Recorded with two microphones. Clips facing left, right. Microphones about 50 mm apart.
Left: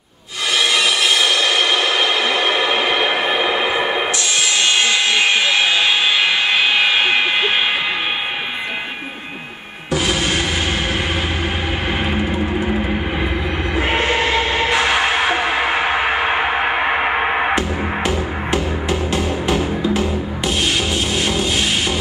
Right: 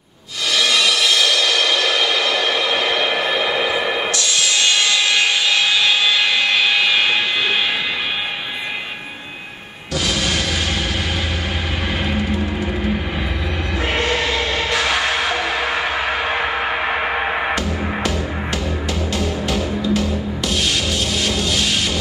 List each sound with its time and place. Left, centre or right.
0.6 s music: left
4.8 s a sound: left
12.1 s music: left
13.7 s music: left